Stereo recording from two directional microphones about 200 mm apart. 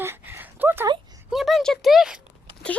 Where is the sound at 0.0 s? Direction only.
10° right (ahead or behind).